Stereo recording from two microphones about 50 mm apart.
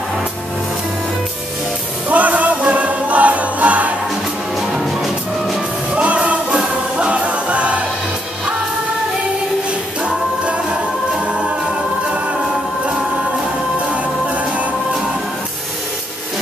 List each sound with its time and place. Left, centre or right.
2.0 s music: right
4.6 s music: centre
5.9 s music: right
10.0 s a capella: right
13.8 s music: right